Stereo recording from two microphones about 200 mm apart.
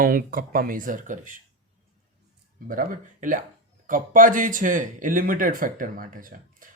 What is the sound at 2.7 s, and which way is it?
Speech, 40° right (ahead or behind).